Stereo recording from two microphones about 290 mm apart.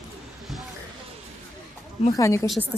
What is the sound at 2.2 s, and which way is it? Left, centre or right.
Speech, centre.